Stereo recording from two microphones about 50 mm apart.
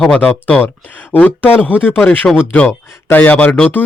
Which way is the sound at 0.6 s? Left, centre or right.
Left.